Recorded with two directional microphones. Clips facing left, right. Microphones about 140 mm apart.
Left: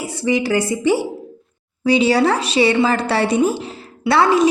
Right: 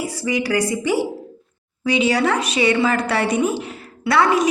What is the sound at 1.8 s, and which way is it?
A woman's voice, 35° left (ahead or behind).